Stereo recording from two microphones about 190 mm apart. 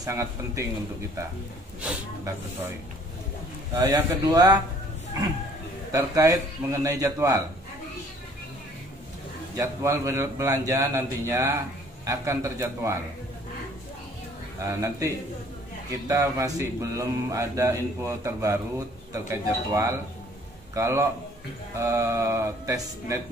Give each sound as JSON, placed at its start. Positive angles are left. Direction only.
{"t": 0.0, "sound": "speech", "side_deg": -15}
{"t": 1.8, "sound": "speech", "side_deg": -10}
{"t": 3.7, "sound": "speech", "side_deg": -15}
{"t": 5.9, "sound": "speech", "side_deg": -15}
{"t": 9.6, "sound": "speech", "side_deg": -15}
{"t": 14.6, "sound": "speech", "side_deg": -15}